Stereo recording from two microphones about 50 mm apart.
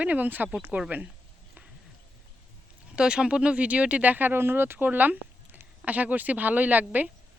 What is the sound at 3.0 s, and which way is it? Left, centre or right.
Speech, centre.